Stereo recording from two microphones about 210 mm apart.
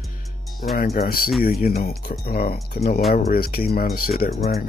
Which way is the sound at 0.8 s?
45° left (ahead or behind).